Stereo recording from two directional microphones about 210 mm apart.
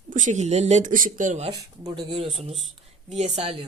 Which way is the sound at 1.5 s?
15° right (ahead or behind).